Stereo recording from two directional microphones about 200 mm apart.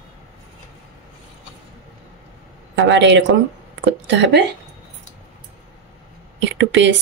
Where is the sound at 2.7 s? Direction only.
65° right (ahead or behind).